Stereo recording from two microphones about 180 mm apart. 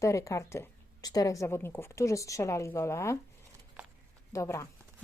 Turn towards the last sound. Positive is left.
turn(degrees=15)  # may be behind; listen again after turning